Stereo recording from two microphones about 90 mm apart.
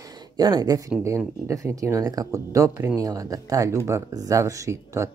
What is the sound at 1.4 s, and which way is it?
Speech, 35° right (ahead or behind).